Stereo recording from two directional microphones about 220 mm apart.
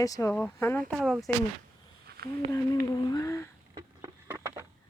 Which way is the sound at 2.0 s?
45° right (ahead or behind).